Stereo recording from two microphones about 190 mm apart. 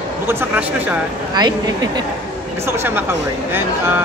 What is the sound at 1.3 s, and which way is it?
Speech, 20° right (ahead or behind).